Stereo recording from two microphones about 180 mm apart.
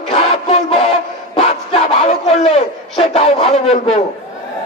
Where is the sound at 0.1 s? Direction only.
35° left (ahead or behind).